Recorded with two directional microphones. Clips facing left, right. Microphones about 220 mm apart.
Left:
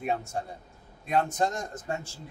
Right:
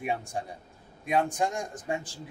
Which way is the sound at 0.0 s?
10° right (ahead or behind).